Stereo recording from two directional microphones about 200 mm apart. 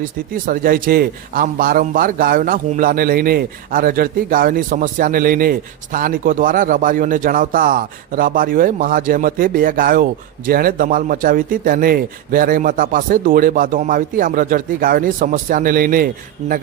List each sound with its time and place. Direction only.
0.4 s a man's voice: 45° right (ahead or behind)